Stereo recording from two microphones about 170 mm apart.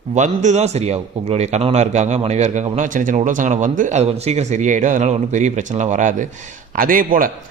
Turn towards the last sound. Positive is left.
turn(degrees=-55)  # may be behind; listen again after turning